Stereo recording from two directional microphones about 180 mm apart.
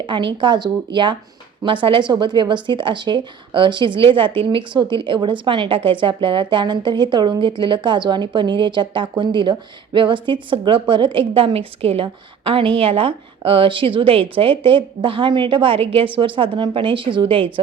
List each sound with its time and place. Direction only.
0.0 s speech: 25° right (ahead or behind)